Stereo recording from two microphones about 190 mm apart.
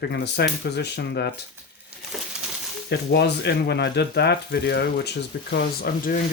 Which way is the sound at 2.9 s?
60° left (ahead or behind).